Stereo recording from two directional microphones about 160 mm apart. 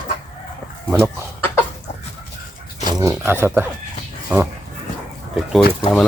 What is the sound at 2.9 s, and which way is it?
Speech, 20° right (ahead or behind).